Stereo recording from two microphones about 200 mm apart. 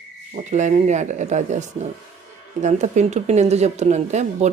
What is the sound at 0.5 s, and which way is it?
Speech, 35° right (ahead or behind).